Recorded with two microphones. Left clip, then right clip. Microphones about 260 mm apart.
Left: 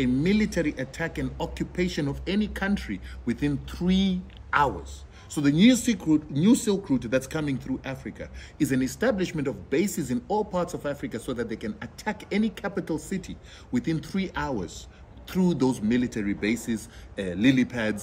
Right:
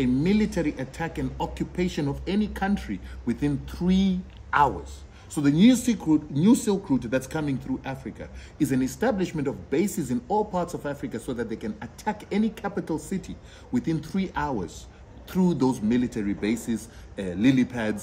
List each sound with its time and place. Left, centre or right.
0.0 s speech: centre